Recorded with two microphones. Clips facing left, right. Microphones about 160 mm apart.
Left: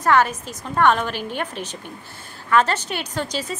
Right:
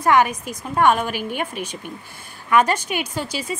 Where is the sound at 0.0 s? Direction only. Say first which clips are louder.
Right 1 dB; 15° right (ahead or behind).